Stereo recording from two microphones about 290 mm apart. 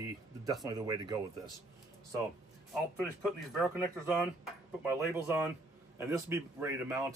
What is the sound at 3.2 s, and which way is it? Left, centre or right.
Speech, centre.